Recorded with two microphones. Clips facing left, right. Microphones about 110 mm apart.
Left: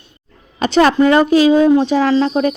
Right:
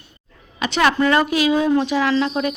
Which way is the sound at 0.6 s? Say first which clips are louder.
Left 6 dB; 35° left (ahead or behind).